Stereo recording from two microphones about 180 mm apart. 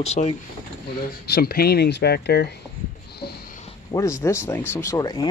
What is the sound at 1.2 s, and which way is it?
Speech, 60° left (ahead or behind).